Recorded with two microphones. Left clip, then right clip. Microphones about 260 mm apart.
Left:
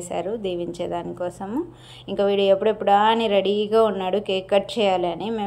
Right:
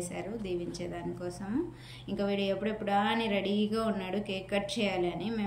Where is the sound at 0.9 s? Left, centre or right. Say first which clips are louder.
Left 11 dB; left.